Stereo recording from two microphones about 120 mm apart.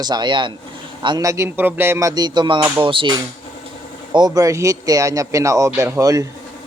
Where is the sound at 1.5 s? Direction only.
15° right (ahead or behind); by 3.2 s 45° right (ahead or behind).